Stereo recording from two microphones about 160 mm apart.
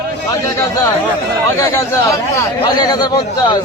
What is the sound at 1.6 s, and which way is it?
A man's voice, 20° left (ahead or behind).